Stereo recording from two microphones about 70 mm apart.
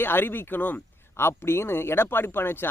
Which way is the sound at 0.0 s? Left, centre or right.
Left.